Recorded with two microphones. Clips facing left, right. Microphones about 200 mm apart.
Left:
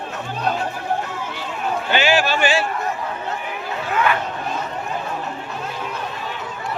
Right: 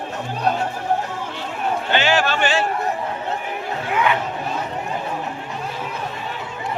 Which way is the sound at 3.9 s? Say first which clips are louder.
Even; 15° right (ahead or behind).